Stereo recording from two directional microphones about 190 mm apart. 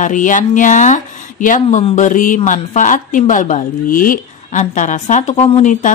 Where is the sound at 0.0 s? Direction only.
40° left (ahead or behind).